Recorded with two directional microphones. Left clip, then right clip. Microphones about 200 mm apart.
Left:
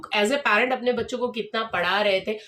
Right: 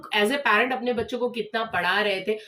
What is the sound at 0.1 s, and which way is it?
Speech, 20° left (ahead or behind).